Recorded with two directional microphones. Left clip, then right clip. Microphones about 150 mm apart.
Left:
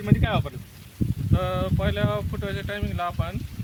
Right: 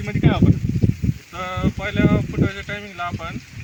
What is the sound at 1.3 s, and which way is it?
Speech, 30° left (ahead or behind).